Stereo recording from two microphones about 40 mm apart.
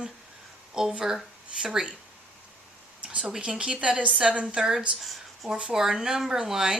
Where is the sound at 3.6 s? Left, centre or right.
Right.